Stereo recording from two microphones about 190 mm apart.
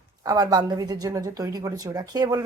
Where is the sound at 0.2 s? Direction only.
20° right (ahead or behind).